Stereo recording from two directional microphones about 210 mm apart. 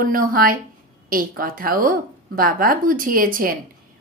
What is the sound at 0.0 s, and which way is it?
A woman's voice, 40° right (ahead or behind).